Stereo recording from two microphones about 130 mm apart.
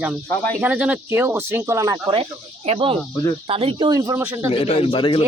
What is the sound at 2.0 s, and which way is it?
Speech, 45° right (ahead or behind).